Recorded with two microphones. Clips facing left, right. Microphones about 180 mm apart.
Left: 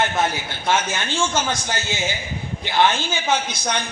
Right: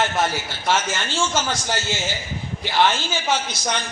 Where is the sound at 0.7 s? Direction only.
55° left (ahead or behind).